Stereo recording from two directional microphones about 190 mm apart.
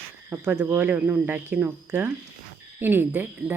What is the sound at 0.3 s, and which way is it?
Speech, 10° right (ahead or behind).